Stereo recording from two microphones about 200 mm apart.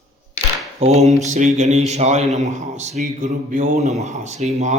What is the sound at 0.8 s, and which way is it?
A man's voice, 35° right (ahead or behind).